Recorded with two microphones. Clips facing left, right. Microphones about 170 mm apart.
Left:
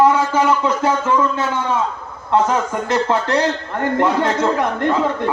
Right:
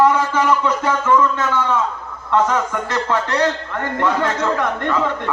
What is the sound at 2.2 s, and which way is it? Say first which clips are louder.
A man's voice: left 1 dB; 30° left (ahead or behind).